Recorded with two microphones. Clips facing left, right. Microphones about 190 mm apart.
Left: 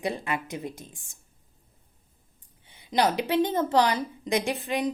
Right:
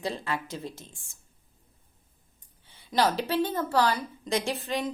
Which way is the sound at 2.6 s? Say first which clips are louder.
Left 1 dB; 15° left (ahead or behind).